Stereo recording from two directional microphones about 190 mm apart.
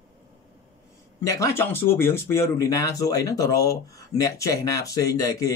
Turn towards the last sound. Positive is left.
turn(degrees=20)  # may be behind; listen again after turning